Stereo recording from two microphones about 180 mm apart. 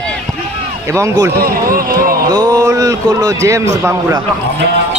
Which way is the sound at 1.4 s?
55° right (ahead or behind).